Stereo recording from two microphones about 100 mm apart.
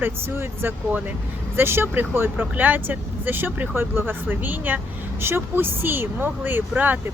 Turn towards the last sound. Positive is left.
turn(degrees=-15)  # may be behind; listen again after turning